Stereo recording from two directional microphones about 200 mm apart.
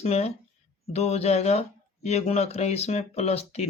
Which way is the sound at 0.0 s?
35° left (ahead or behind).